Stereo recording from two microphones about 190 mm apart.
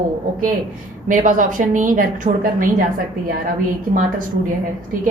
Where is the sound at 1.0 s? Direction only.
45° right (ahead or behind).